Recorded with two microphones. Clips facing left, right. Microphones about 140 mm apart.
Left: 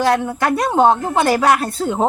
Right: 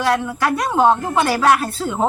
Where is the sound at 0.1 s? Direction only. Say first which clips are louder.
Left 2 dB; 30° left (ahead or behind).